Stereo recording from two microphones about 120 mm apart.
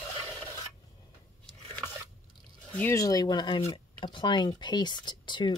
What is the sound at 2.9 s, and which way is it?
Speech, 30° left (ahead or behind).